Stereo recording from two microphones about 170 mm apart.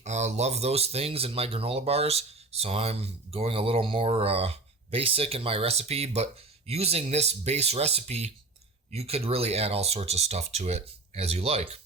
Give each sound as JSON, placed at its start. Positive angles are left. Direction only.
{"t": 0.0, "sound": "speech", "side_deg": -40}